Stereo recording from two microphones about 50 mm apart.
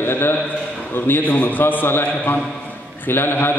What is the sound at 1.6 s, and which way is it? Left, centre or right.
A man's voice, left.